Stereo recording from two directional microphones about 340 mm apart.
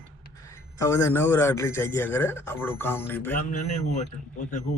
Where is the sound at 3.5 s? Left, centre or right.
Left.